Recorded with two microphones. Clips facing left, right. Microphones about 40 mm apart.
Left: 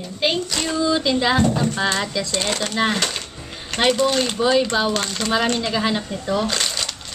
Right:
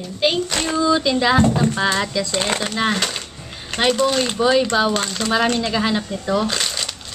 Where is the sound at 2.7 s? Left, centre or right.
Centre.